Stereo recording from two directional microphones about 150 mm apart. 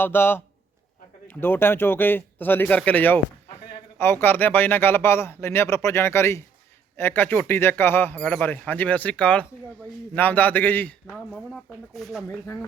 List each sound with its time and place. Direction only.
0.0 s speech: 15° left (ahead or behind)
11.1 s speech: centre (ahead or behind)